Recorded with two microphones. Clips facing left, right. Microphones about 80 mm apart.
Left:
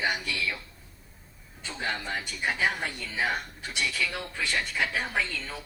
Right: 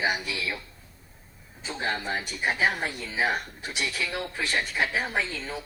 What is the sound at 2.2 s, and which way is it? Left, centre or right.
A man's voice, right.